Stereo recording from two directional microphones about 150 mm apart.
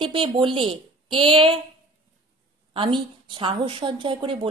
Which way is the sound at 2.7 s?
35° right (ahead or behind).